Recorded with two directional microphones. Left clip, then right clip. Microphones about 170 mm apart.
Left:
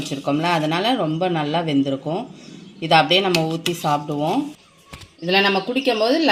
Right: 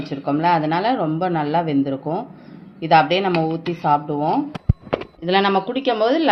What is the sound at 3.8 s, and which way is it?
Speech, 35° left (ahead or behind).